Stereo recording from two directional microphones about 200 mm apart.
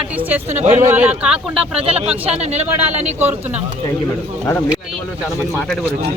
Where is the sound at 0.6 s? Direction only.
35° right (ahead or behind).